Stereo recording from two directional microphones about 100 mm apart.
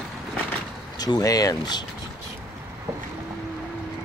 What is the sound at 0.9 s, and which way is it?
Speech, 40° left (ahead or behind).